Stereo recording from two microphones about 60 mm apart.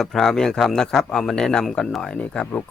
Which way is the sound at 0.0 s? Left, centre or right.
Centre.